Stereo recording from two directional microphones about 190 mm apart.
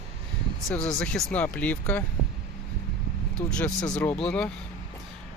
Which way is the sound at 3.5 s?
5° left (ahead or behind).